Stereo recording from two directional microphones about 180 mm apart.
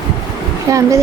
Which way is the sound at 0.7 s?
15° right (ahead or behind).